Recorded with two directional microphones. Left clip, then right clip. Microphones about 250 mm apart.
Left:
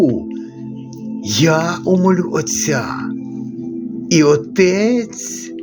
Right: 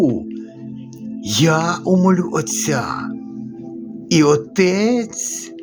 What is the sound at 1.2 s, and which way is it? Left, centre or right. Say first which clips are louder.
Speech: left 2 dB; centre.